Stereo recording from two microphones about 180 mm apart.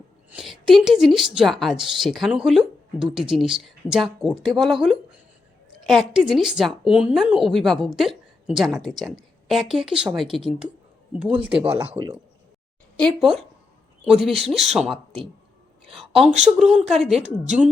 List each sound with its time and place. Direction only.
0.3 s a woman's voice: 5° right (ahead or behind)
11.5 s speech: 30° right (ahead or behind)
13.0 s a woman's voice: 5° left (ahead or behind)